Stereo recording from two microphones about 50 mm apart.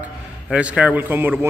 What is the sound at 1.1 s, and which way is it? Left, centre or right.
Speech, right.